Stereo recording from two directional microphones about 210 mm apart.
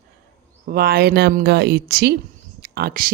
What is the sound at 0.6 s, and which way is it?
Speech, 45° right (ahead or behind).